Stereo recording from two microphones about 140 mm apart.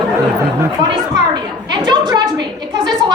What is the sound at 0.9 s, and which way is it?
A woman's voice, 30° right (ahead or behind).